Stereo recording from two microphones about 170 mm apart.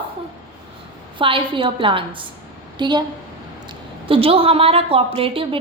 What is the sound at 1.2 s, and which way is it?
A woman's voice, 30° right (ahead or behind).